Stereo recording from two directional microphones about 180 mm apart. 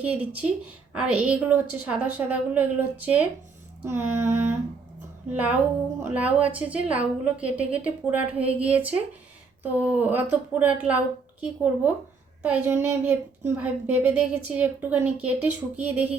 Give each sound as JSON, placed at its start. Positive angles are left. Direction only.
{"t": 0.0, "sound": "a woman's voice", "side_deg": -10}
{"t": 8.4, "sound": "speech", "side_deg": -35}
{"t": 8.6, "sound": "a woman's voice", "side_deg": -10}